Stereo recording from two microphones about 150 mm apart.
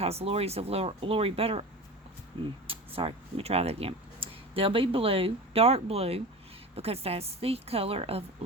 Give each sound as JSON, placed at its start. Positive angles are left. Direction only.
{"t": 0.0, "sound": "speech", "side_deg": -45}
{"t": 2.6, "sound": "speech", "side_deg": -40}